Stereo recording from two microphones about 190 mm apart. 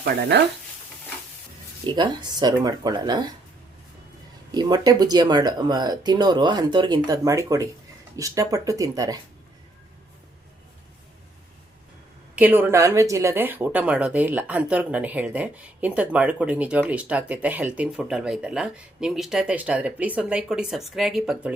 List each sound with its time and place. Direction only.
0.0 s speech: 60° right (ahead or behind)
1.9 s speech: 20° right (ahead or behind)
4.5 s speech: 20° right (ahead or behind)
12.4 s speech: 10° right (ahead or behind)